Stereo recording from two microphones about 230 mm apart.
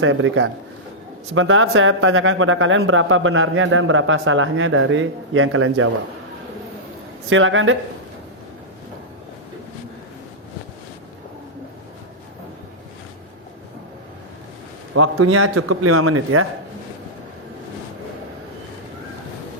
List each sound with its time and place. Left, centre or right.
0.0 s speech: right
7.3 s speech: right
14.9 s a man's voice: right